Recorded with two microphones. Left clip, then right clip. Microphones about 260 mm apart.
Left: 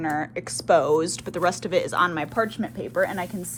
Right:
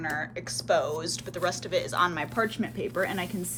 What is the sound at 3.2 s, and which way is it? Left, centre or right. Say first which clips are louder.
Speech: left 2 dB; centre.